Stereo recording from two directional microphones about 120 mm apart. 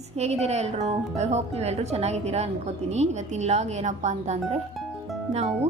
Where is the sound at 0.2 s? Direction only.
65° right (ahead or behind).